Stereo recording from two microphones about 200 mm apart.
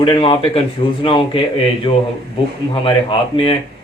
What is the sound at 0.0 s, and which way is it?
Speech, 25° left (ahead or behind).